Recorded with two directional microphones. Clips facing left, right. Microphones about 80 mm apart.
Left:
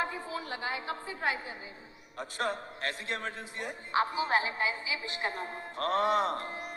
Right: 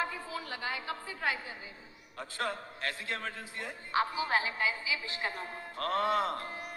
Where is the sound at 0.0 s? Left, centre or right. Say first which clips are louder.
Left 2 dB; left.